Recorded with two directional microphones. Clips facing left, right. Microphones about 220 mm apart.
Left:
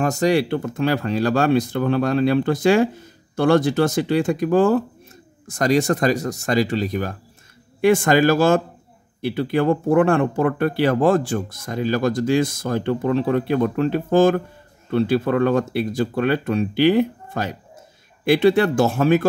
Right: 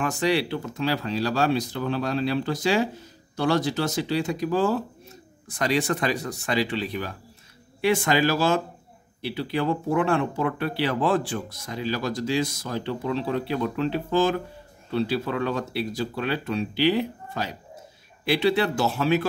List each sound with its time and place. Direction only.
0.0 s speech: 40° left (ahead or behind)